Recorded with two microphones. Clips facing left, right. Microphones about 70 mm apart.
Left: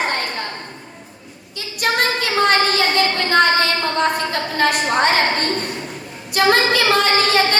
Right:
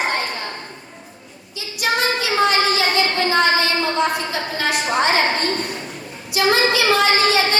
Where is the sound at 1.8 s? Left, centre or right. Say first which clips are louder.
Left 1 dB; left.